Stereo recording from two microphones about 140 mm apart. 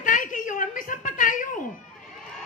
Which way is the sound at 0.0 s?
70° left (ahead or behind).